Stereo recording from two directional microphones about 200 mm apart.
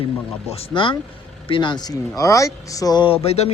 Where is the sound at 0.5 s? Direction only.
25° left (ahead or behind).